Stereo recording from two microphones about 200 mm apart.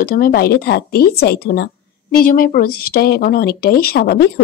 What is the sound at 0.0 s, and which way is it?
Speech, 45° left (ahead or behind).